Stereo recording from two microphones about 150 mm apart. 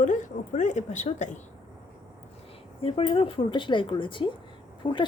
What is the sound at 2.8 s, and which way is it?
A woman's voice, 40° left (ahead or behind).